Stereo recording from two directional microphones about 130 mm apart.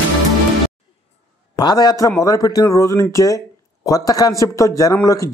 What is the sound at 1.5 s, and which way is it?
A man's voice, 30° left (ahead or behind).